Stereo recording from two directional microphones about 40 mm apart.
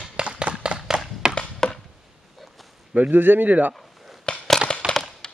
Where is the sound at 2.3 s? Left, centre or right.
Centre.